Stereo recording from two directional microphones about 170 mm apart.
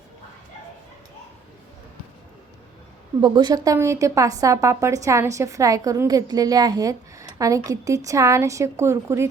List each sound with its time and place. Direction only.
3.2 s a woman's voice: 25° right (ahead or behind)